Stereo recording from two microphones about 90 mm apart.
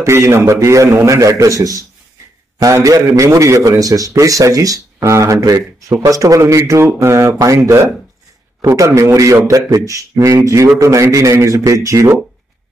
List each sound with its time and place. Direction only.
0.0 s a man's voice: 30° right (ahead or behind)